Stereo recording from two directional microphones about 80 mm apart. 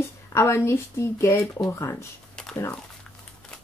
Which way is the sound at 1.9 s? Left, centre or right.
Centre.